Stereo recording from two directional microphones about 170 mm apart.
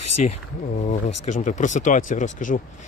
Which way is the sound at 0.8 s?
45° left (ahead or behind).